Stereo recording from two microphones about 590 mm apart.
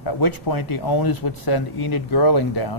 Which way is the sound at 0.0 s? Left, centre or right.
Left.